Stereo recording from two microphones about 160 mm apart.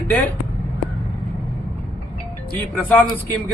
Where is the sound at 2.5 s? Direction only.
10° left (ahead or behind).